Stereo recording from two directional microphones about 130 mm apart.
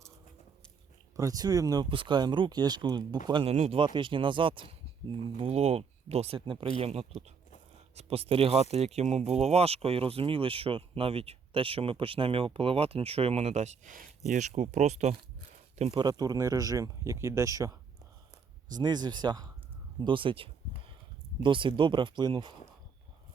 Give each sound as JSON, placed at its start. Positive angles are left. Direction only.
{"t": 1.1, "sound": "speech", "side_deg": -25}
{"t": 3.4, "sound": "speech", "side_deg": -55}
{"t": 3.8, "sound": "speech", "side_deg": -40}
{"t": 5.4, "sound": "speech", "side_deg": -55}
{"t": 14.3, "sound": "speech", "side_deg": -65}
{"t": 16.0, "sound": "speech", "side_deg": -30}
{"t": 20.0, "sound": "a sound", "side_deg": -40}
{"t": 21.4, "sound": "speech", "side_deg": -40}